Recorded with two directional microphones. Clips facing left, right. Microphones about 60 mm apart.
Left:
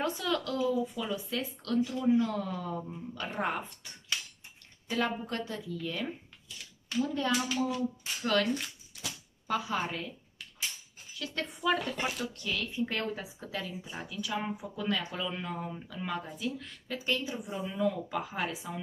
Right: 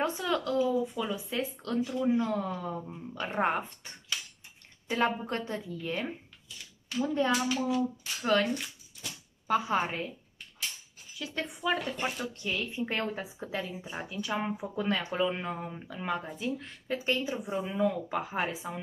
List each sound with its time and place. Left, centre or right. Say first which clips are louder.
0.0 s speech: right 2 dB; right
3.2 s speech: right 4 dB; right
7.4 s a child's voice: right 2 dB; centre
8.2 s speech: right 2 dB; right
8.9 s a sound: left 2 dB; left
9.5 s speech: right 4 dB; right
11.1 s speech: right 1 dB; centre; by 18.7 s right